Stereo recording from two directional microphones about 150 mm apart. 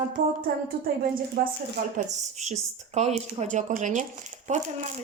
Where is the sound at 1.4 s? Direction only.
90° right.